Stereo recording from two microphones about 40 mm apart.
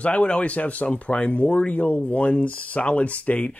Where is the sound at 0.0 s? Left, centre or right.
Left.